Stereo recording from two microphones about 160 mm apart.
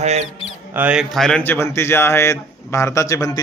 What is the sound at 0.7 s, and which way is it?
A man's voice, 10° right (ahead or behind).